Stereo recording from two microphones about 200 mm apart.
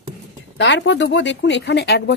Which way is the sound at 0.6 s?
60° left (ahead or behind).